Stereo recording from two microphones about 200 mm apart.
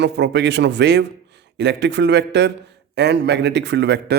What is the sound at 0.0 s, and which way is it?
A man's voice, 60° right (ahead or behind).